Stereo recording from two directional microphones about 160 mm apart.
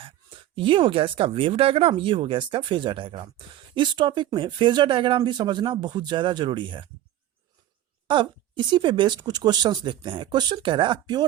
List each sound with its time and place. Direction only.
0.0 s speech: 30° right (ahead or behind)
8.0 s speech: 30° right (ahead or behind)